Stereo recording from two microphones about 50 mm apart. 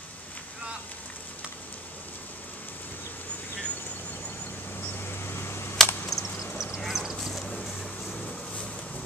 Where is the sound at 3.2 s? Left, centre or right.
Left.